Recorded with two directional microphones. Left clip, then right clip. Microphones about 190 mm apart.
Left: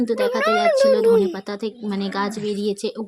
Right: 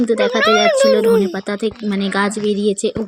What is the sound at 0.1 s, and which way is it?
Speech, 20° right (ahead or behind).